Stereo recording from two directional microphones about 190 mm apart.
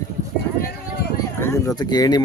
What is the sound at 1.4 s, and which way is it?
Speech, 15° left (ahead or behind).